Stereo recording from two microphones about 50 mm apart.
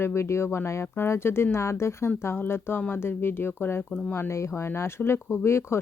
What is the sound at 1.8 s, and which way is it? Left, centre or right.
Speech, left.